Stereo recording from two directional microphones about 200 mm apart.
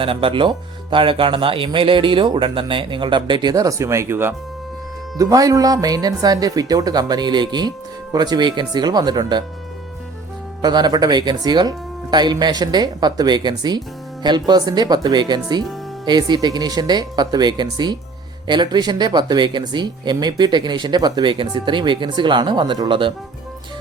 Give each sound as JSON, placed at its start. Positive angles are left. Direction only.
{"t": 0.0, "sound": "speech", "side_deg": -25}
{"t": 10.6, "sound": "speech", "side_deg": -20}